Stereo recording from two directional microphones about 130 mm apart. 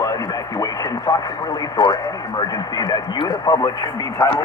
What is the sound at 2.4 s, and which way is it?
Speech, 30° left (ahead or behind).